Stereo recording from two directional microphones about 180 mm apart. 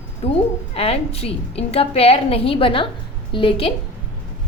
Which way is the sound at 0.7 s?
35° left (ahead or behind).